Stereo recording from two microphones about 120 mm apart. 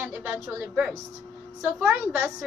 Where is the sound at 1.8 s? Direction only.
15° right (ahead or behind).